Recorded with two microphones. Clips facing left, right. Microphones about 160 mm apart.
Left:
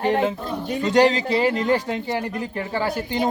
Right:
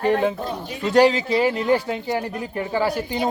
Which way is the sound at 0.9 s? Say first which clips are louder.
Right 2 dB; 5° right (ahead or behind).